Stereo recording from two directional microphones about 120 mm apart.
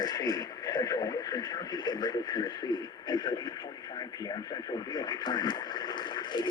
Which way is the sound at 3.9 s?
35° left (ahead or behind).